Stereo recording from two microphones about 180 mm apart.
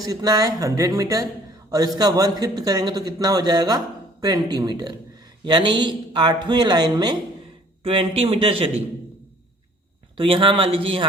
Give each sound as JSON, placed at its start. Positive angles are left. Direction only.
{"t": 0.1, "sound": "a man's voice", "side_deg": -20}
{"t": 10.2, "sound": "a man's voice", "side_deg": -30}